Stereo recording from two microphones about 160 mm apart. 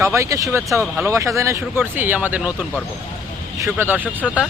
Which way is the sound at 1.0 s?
20° right (ahead or behind).